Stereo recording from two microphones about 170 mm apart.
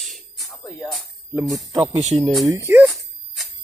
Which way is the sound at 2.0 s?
40° right (ahead or behind).